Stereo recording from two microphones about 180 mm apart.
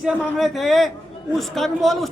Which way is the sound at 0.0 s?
Centre (ahead or behind).